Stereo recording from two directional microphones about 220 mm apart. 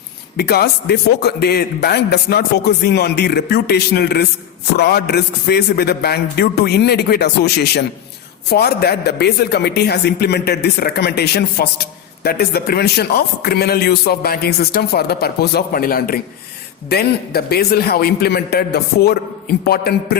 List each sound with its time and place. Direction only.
0.3 s a man's voice: 45° left (ahead or behind)